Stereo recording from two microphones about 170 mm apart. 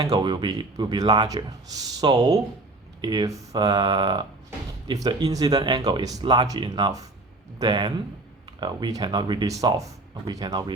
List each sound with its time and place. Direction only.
0.0 s speech: 25° right (ahead or behind)